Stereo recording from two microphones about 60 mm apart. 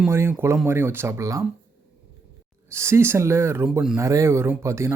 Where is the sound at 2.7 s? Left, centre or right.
Right.